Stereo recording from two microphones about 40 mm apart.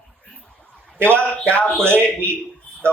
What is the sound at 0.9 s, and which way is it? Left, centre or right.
Speech, right.